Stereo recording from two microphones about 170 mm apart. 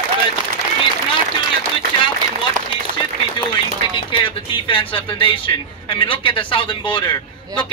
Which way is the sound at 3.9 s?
30° left (ahead or behind).